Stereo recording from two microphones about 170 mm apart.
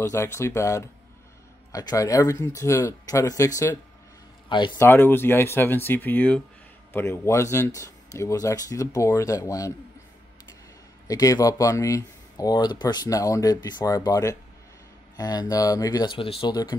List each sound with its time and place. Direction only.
0.0 s a man's voice: 15° left (ahead or behind)
4.7 s speech: 15° left (ahead or behind)
11.1 s speech: 20° left (ahead or behind)